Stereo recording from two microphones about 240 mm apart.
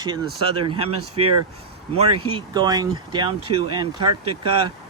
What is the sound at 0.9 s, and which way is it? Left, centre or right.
Speech, right.